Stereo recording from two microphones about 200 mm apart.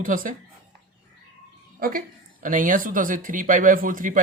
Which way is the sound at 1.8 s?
45° right (ahead or behind).